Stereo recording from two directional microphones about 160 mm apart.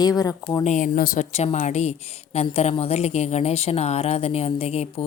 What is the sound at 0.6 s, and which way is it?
Speech, 55° left (ahead or behind).